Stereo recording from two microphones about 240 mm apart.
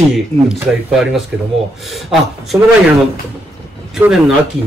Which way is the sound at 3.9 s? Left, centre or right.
Centre.